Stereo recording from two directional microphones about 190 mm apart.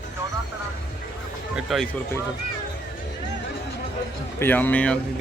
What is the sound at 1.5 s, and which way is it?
Speech, centre (ahead or behind).